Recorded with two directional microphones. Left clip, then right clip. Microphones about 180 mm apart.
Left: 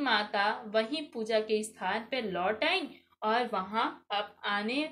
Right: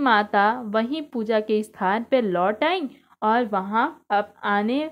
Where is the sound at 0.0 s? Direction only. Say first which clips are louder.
Right 10 dB; 50° right (ahead or behind).